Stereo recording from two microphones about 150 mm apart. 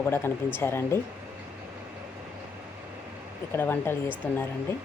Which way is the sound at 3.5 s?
15° left (ahead or behind).